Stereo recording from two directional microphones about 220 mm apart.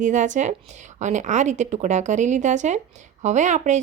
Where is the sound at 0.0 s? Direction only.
35° right (ahead or behind).